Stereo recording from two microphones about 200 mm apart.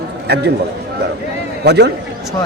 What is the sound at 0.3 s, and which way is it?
Speech, 55° right (ahead or behind).